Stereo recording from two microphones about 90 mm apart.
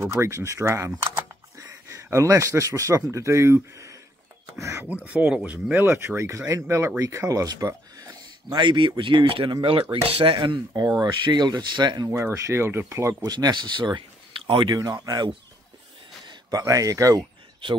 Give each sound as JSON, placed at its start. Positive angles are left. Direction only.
{"t": 0.0, "sound": "speech", "side_deg": -30}
{"t": 2.0, "sound": "speech", "side_deg": -35}
{"t": 5.0, "sound": "speech", "side_deg": -15}
{"t": 5.9, "sound": "speech", "side_deg": -30}
{"t": 10.7, "sound": "speech", "side_deg": -45}
{"t": 12.1, "sound": "speech", "side_deg": -30}
{"t": 13.2, "sound": "speech", "side_deg": -50}
{"t": 14.7, "sound": "speech", "side_deg": -45}